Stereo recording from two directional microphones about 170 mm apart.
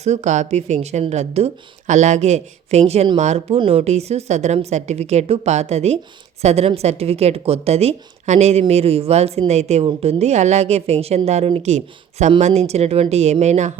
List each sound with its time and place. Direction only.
0.0 s speech: 45° right (ahead or behind)